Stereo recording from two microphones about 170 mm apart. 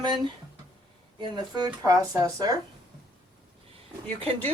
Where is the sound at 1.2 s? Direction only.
25° right (ahead or behind).